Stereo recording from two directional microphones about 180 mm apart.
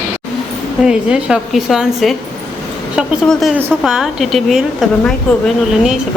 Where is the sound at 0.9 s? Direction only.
5° right (ahead or behind).